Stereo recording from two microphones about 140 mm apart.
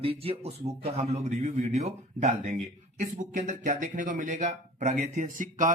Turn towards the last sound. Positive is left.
turn(degrees=-70)  # may be behind; listen again after turning